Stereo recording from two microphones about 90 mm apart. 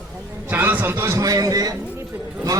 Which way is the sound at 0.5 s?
20° right (ahead or behind).